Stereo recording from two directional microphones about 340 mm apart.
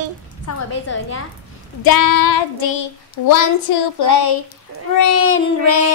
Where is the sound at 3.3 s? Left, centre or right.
Left.